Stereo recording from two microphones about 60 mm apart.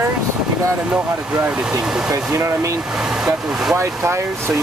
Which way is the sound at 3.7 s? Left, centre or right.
Right.